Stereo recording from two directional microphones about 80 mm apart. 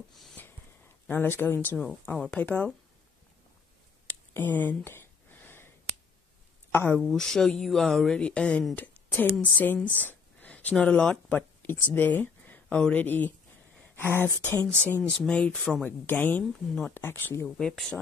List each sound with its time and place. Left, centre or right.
1.0 s a woman's voice: left
4.1 s a sound: left
6.7 s speech: left
7.0 s a woman's voice: centre
9.9 s a sound: centre
11.2 s a sound: left
12.9 s a woman's voice: left; by 15.8 s centre
15.8 s a woman's voice: left
16.4 s speech: centre
16.9 s a woman's voice: left
17.5 s speech: centre